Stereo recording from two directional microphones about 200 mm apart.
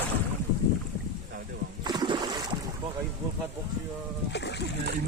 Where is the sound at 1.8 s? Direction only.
20° right (ahead or behind).